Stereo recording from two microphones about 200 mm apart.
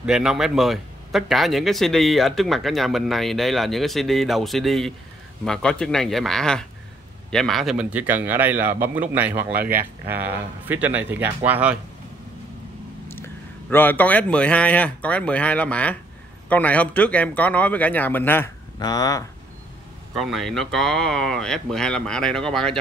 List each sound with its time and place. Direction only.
0.0 s a man's voice: 5° right (ahead or behind)
9.6 s speech: 45° right (ahead or behind)
10.0 s a man's voice: 10° right (ahead or behind)
13.1 s a man's voice: 10° left (ahead or behind)
20.2 s a man's voice: centre (ahead or behind)